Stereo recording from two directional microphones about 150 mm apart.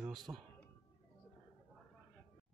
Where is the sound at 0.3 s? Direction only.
20° right (ahead or behind).